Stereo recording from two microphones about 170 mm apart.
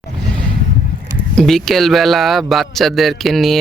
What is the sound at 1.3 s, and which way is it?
A man's voice, 5° left (ahead or behind).